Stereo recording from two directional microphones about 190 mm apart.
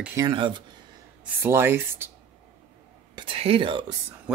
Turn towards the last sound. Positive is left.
turn(degrees=-25)  # may be behind; listen again after turning